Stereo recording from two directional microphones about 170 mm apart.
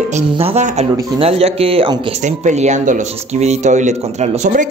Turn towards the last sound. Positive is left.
turn(degrees=-45)  # may be behind; listen again after turning